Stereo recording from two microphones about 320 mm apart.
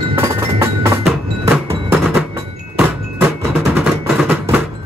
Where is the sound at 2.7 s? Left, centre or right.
Centre.